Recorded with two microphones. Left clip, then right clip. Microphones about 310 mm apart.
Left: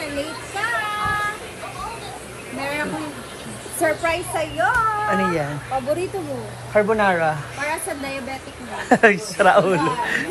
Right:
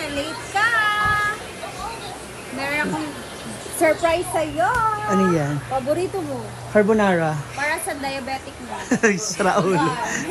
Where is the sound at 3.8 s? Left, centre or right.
Right.